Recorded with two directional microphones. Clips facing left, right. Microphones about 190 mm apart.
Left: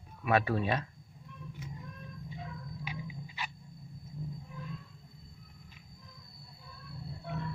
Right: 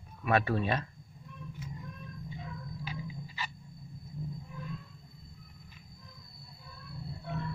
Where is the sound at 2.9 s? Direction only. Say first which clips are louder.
Right 1 dB; 15° left (ahead or behind).